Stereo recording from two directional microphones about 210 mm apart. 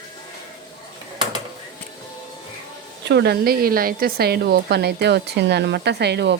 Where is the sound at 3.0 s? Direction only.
55° right (ahead or behind).